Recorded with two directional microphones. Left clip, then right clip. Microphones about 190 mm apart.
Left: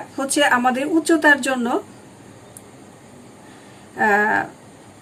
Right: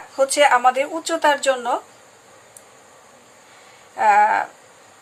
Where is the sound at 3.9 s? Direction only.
40° right (ahead or behind).